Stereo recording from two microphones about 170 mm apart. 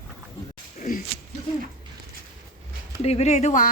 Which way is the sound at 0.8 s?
55° left (ahead or behind).